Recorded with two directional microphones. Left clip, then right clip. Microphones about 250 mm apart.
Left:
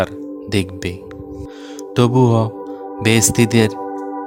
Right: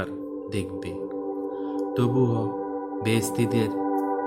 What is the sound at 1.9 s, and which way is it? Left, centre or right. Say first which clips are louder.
Speech: left 11 dB; left.